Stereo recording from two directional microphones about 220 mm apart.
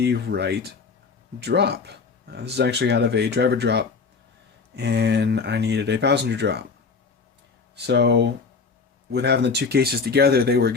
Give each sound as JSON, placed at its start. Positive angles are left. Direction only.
{"t": 0.0, "sound": "speech", "side_deg": -50}
{"t": 7.8, "sound": "speech", "side_deg": -50}